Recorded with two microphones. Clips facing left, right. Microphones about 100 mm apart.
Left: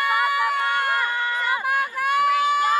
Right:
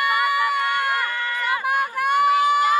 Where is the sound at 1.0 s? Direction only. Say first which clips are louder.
Left 1 dB; 20° left (ahead or behind).